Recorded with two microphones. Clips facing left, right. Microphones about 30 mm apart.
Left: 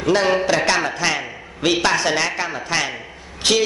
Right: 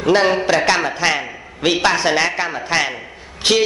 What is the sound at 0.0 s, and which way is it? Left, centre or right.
A man's voice, centre.